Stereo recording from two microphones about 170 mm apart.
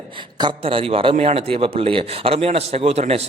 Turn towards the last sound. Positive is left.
turn(degrees=-35)  # may be behind; listen again after turning